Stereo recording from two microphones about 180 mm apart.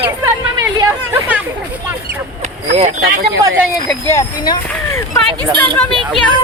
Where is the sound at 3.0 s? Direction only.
70° right (ahead or behind).